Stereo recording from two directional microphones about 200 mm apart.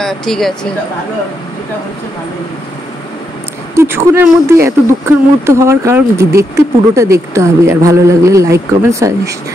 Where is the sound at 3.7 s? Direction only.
15° right (ahead or behind).